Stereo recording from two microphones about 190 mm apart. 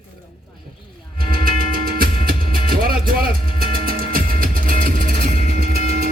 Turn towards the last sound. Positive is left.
turn(degrees=-50)  # may be behind; listen again after turning